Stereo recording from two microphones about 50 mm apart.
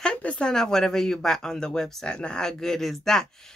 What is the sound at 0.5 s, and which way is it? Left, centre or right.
Speech, centre.